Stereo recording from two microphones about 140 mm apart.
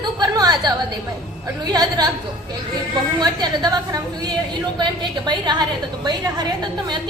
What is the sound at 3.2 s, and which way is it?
A woman's voice, 30° right (ahead or behind).